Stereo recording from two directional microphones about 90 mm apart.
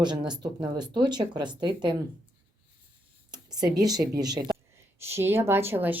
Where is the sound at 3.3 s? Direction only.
45° right (ahead or behind).